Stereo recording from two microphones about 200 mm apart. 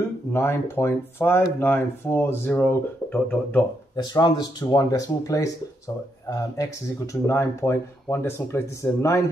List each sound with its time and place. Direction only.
0.3 s speech: 10° left (ahead or behind)
3.9 s speech: 20° left (ahead or behind)
6.5 s speech: 15° left (ahead or behind)